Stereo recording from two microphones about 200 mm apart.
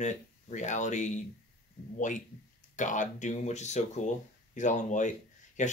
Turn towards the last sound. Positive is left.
turn(degrees=40)  # may be behind; listen again after turning